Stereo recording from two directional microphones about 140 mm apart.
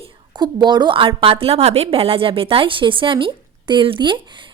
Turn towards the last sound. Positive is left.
turn(degrees=-35)  # may be behind; listen again after turning